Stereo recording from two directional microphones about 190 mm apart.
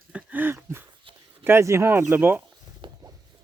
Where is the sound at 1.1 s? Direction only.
30° right (ahead or behind).